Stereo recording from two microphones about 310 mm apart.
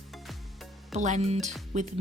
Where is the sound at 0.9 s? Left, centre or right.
Right.